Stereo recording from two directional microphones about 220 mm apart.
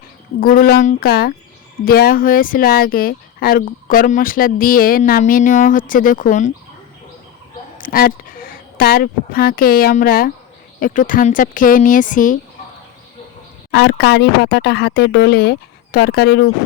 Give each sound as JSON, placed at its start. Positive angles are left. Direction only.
{"t": 0.3, "sound": "speech", "side_deg": 40}
{"t": 7.8, "sound": "speech", "side_deg": 40}
{"t": 13.7, "sound": "speech", "side_deg": 50}